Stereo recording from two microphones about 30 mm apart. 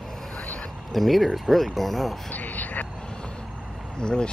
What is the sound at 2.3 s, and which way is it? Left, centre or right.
Speech, left.